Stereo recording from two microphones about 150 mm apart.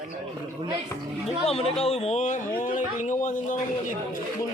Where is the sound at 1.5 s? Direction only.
40° left (ahead or behind); by 3.9 s 60° left (ahead or behind).